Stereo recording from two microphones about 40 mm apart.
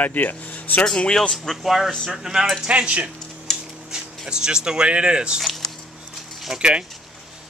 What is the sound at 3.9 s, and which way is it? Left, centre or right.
Speech, centre.